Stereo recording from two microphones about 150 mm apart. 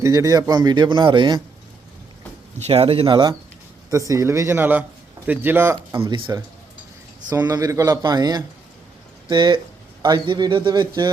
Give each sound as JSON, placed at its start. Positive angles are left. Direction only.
{"t": 0.0, "sound": "speech", "side_deg": -20}
{"t": 2.6, "sound": "a man's voice", "side_deg": -45}
{"t": 5.9, "sound": "speech", "side_deg": -30}